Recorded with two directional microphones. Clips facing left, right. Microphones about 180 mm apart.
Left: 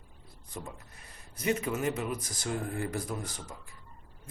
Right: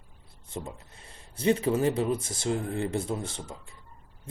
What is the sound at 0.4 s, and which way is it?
Speech, 25° right (ahead or behind).